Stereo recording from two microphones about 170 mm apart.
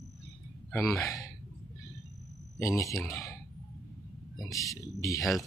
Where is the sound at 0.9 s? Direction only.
20° left (ahead or behind).